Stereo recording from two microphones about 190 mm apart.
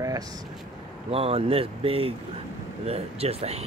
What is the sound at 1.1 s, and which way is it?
Speech, 30° right (ahead or behind).